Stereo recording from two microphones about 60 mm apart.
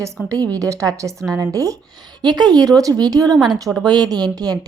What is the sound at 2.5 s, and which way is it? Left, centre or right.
Speech, right.